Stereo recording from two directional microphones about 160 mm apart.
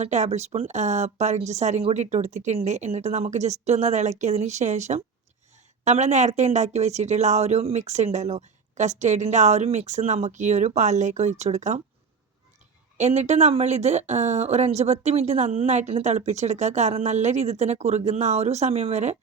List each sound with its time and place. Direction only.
0.0 s speech: 45° right (ahead or behind)
13.0 s speech: 45° right (ahead or behind)